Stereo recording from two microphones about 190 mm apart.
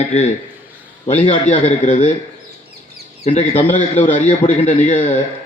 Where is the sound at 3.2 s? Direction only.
30° left (ahead or behind).